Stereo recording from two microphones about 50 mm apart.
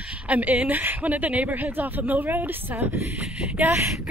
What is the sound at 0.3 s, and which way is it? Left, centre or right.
A woman's voice, right.